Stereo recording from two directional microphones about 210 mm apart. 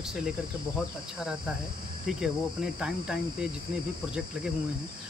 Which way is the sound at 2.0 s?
5° right (ahead or behind).